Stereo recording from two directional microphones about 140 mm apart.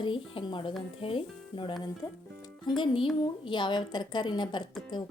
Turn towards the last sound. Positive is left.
turn(degrees=35)  # may be behind; listen again after turning